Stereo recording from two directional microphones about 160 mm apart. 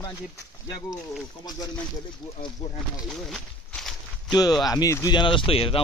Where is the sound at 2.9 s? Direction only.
Centre (ahead or behind).